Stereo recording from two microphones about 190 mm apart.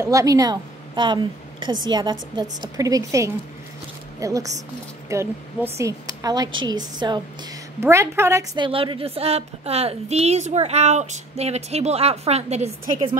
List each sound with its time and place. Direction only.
0.0 s a woman's voice: 15° right (ahead or behind); by 13.1 s 35° right (ahead or behind)